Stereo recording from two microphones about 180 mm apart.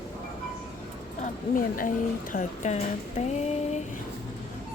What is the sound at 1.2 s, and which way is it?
Speech, 50° left (ahead or behind).